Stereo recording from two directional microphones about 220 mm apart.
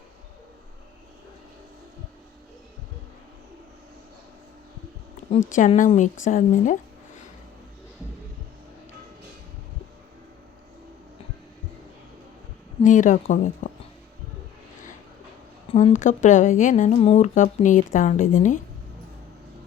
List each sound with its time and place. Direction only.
5.5 s speech: 35° left (ahead or behind)
12.8 s speech: 35° left (ahead or behind)
15.7 s speech: 30° left (ahead or behind)